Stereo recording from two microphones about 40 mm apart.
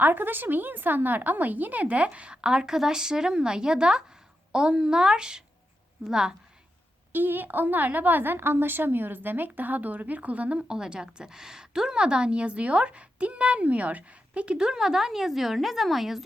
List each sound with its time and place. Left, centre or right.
0.0 s a woman's voice: right
2.0 s a woman's voice: right
7.1 s a woman's voice: right
10.6 s a woman's voice: centre